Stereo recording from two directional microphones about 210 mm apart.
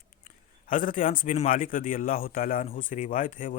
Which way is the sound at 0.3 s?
40° left (ahead or behind).